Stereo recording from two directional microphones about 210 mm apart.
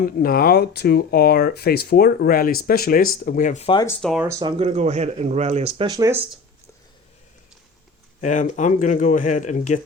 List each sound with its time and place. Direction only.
0.0 s speech: 45° left (ahead or behind)
3.7 s speech: 20° left (ahead or behind)
3.9 s speech: 5° left (ahead or behind)
4.2 s speech: 15° right (ahead or behind)
8.2 s speech: 35° left (ahead or behind)